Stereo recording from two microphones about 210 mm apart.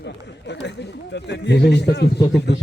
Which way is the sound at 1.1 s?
55° left (ahead or behind).